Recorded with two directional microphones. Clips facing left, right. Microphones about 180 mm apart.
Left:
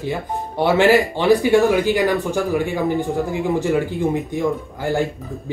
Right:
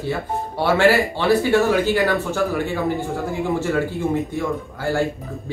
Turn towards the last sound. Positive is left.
turn(degrees=20)  # may be behind; listen again after turning